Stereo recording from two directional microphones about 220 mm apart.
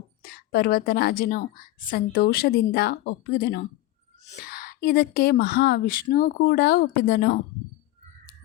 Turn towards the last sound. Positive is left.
turn(degrees=40)  # may be behind; listen again after turning